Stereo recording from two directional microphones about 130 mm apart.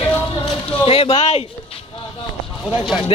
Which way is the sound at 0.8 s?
50° left (ahead or behind).